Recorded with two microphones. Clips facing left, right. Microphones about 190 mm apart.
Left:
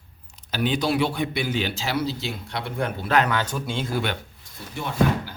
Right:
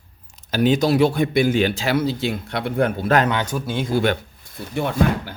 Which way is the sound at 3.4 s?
10° right (ahead or behind).